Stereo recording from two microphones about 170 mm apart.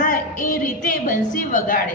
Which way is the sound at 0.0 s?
50° left (ahead or behind).